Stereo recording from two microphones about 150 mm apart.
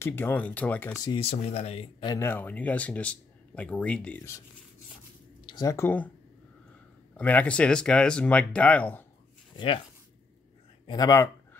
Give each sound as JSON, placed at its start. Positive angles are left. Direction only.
{"t": 0.0, "sound": "speech", "side_deg": 15}
{"t": 1.1, "sound": "speech", "side_deg": 45}
{"t": 2.0, "sound": "speech", "side_deg": 15}
{"t": 5.5, "sound": "speech", "side_deg": 25}
{"t": 7.2, "sound": "speech", "side_deg": 10}
{"t": 10.9, "sound": "speech", "side_deg": 25}